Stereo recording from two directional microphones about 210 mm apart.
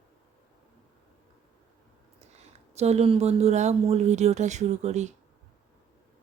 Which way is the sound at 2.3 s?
30° right (ahead or behind).